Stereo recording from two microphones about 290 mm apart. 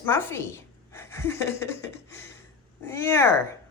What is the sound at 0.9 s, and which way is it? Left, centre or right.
Gasp, centre.